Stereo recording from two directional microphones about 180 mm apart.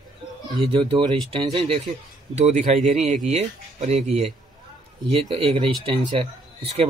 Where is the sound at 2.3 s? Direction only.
40° right (ahead or behind).